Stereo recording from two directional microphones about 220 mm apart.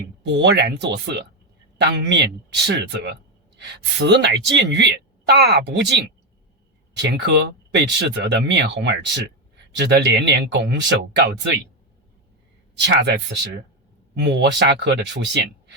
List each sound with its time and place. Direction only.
0.3 s a woman's voice: 50° right (ahead or behind)
7.0 s a woman's voice: 50° right (ahead or behind)
12.8 s a woman's voice: 50° right (ahead or behind)